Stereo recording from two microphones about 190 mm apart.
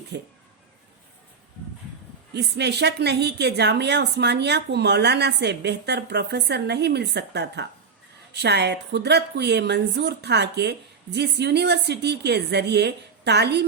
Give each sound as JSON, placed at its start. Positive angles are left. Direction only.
{"t": 0.1, "sound": "speech", "side_deg": -60}
{"t": 2.3, "sound": "speech", "side_deg": -60}